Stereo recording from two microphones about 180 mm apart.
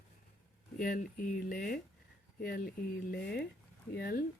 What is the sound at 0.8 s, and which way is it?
Speech, 50° left (ahead or behind).